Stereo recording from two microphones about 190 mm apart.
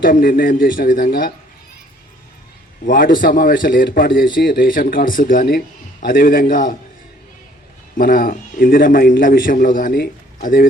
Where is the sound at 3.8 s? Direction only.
60° left (ahead or behind).